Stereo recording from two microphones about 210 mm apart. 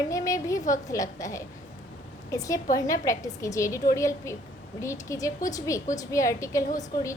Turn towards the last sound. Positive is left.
turn(degrees=15)  # may be behind; listen again after turning